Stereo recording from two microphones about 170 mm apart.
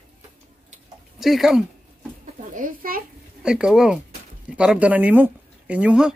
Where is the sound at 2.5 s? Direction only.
50° right (ahead or behind).